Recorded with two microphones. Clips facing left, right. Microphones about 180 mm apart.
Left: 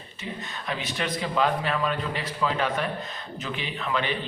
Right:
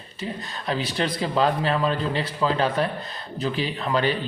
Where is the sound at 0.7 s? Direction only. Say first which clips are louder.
Right 5 dB; 35° right (ahead or behind).